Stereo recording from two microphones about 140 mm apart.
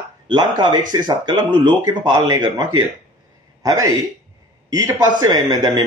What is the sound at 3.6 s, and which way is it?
Speech, 25° right (ahead or behind).